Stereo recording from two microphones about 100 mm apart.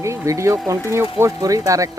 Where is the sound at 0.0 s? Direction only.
30° right (ahead or behind).